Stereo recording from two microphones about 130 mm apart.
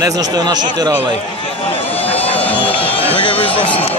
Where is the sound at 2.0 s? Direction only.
50° left (ahead or behind).